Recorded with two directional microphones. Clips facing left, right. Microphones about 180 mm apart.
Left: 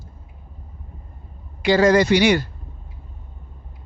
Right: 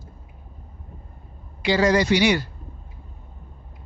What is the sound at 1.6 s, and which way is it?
Speech, 50° left (ahead or behind).